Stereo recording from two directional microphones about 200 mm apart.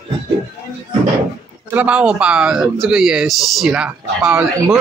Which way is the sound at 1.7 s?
5° right (ahead or behind).